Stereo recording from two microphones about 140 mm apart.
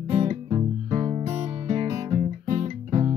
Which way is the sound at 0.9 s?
40° right (ahead or behind).